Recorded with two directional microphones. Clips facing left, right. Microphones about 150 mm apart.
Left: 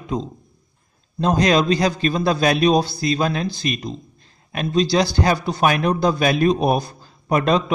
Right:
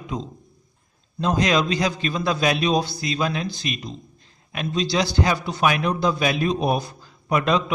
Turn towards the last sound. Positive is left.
turn(degrees=40)  # may be behind; listen again after turning